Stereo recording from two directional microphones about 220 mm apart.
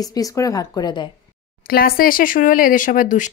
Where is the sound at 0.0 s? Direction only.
15° left (ahead or behind).